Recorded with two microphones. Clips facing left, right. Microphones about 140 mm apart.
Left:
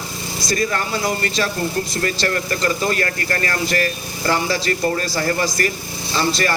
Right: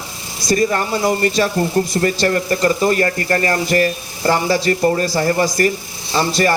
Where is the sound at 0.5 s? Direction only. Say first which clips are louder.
Right 5 dB; 25° right (ahead or behind).